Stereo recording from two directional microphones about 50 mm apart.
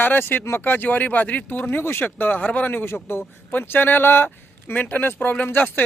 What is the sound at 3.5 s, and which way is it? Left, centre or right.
Speech, left.